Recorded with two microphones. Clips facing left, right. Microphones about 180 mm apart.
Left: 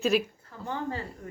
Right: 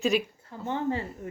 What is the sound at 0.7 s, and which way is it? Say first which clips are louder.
Speech: right 4 dB; 20° right (ahead or behind).